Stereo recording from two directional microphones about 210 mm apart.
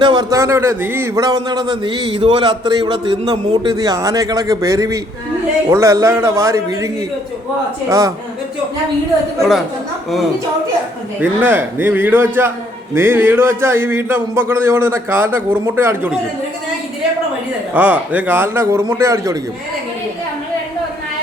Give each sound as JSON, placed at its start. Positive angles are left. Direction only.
{"t": 0.0, "sound": "a man's voice", "side_deg": -20}
{"t": 9.4, "sound": "a woman's voice", "side_deg": 0}
{"t": 11.2, "sound": "speech", "side_deg": -10}
{"t": 17.7, "sound": "speech", "side_deg": -5}